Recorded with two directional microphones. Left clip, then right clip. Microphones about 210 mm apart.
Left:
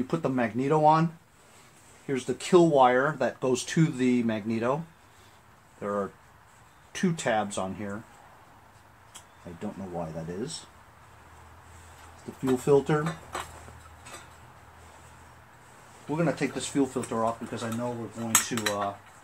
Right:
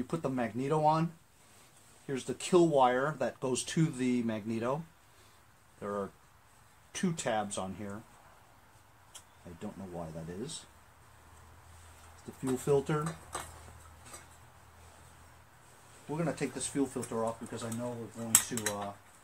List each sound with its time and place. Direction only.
0.0 s speech: 10° right (ahead or behind)
2.0 s speech: 15° right (ahead or behind)
5.8 s speech: 10° right (ahead or behind)
9.6 s speech: 15° right (ahead or behind)
12.4 s speech: 10° right (ahead or behind)
16.1 s speech: 5° right (ahead or behind)
18.3 s speech: 5° right (ahead or behind)